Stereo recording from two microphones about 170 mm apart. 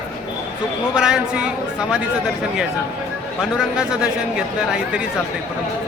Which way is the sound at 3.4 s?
5° right (ahead or behind).